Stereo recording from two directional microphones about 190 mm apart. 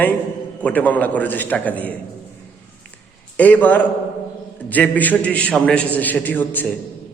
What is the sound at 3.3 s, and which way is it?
A man's voice, 10° left (ahead or behind).